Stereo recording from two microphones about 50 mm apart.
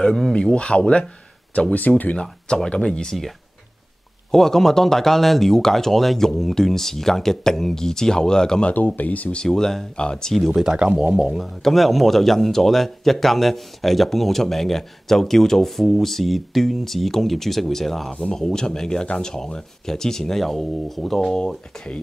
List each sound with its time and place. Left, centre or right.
0.0 s speech: centre
0.4 s speech: centre
2.1 s speech: centre
4.3 s speech: centre
8.7 s speech: left
9.4 s speech: centre
10.4 s speech: centre
11.6 s speech: centre
21.4 s speech: centre